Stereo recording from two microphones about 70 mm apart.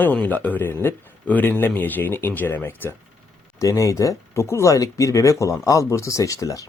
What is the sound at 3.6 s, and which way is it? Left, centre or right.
Speech, left.